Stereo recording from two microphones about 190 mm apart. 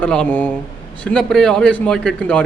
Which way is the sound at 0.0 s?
5° left (ahead or behind).